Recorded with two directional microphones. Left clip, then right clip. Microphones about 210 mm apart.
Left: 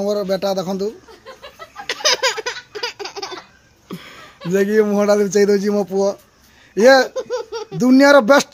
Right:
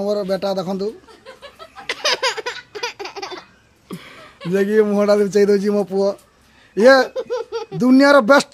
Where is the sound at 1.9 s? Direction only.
5° right (ahead or behind).